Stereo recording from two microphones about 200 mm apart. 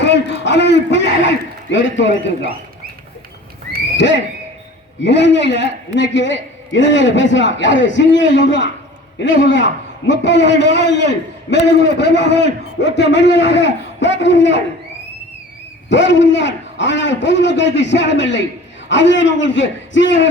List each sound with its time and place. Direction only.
0.0 s a man's voice: 60° left (ahead or behind)
3.9 s a man's voice: 65° left (ahead or behind)
15.9 s a man's voice: 65° left (ahead or behind)